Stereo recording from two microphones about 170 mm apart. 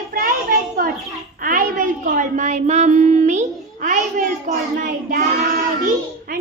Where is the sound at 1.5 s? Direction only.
55° right (ahead or behind).